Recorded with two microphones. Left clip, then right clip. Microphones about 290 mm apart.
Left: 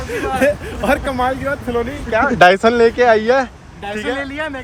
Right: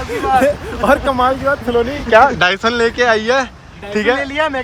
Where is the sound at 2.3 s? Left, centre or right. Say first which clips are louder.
Left 4 dB; centre.